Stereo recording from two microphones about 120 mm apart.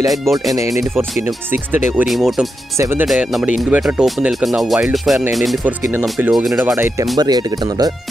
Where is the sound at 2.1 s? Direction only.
Centre (ahead or behind).